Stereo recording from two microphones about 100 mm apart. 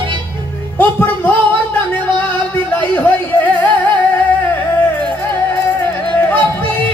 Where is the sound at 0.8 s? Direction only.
20° left (ahead or behind).